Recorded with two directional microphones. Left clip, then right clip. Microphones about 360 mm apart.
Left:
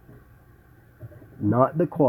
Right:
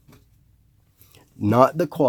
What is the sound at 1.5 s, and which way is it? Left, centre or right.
Speech, centre.